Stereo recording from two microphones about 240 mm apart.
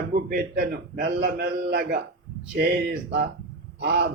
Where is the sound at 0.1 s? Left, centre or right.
Right.